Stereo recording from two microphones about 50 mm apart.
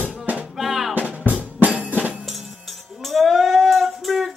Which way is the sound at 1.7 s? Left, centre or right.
Right.